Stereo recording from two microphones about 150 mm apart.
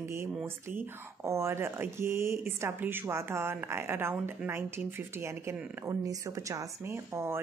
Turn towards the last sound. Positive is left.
turn(degrees=-15)  # may be behind; listen again after turning